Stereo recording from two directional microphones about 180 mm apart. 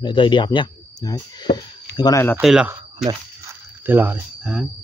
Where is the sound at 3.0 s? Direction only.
15° right (ahead or behind).